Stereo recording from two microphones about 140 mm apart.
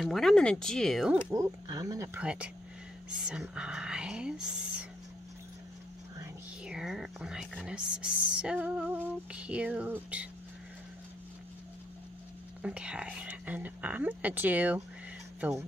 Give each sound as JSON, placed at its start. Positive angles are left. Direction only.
{"t": 0.0, "sound": "speech", "side_deg": 0}
{"t": 1.3, "sound": "speech", "side_deg": -25}
{"t": 2.1, "sound": "speech", "side_deg": -10}
{"t": 6.6, "sound": "speech", "side_deg": -5}
{"t": 12.6, "sound": "speech", "side_deg": -5}